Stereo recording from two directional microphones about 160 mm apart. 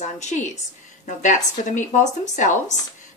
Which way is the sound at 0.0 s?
45° left (ahead or behind).